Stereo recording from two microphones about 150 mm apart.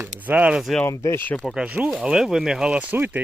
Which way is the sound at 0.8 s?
20° left (ahead or behind).